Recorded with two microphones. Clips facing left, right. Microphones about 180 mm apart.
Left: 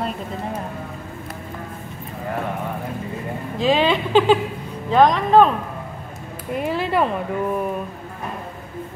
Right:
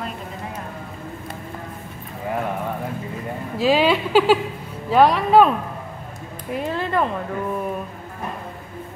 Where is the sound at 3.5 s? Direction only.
5° right (ahead or behind).